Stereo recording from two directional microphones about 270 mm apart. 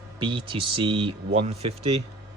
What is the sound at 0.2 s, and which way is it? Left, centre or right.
Speech, centre.